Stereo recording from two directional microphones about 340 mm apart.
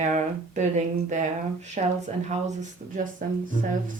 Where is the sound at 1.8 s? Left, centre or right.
Right.